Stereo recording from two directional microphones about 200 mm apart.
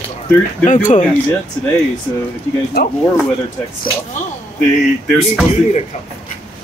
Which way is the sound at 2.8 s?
55° left (ahead or behind).